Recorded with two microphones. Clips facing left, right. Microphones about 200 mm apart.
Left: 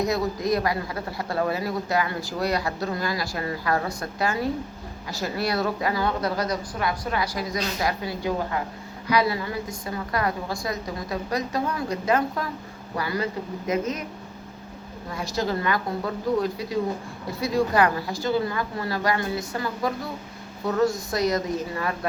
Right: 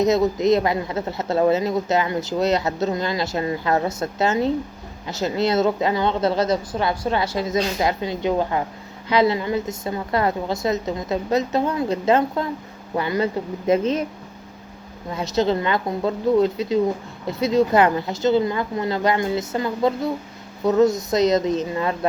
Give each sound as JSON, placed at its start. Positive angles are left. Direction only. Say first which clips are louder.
{"t": 0.0, "sound": "speech", "louder": "right 7 dB", "side_deg": -20}
{"t": 15.1, "sound": "speech", "louder": "right 6 dB", "side_deg": -20}